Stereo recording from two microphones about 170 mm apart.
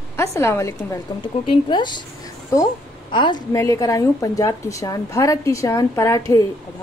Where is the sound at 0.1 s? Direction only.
15° left (ahead or behind).